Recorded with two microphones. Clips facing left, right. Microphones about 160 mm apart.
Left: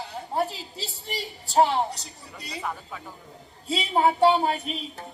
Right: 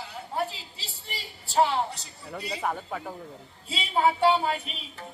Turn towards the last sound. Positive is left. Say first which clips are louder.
# left 4 dB
turn(degrees=40)  # may be behind; listen again after turning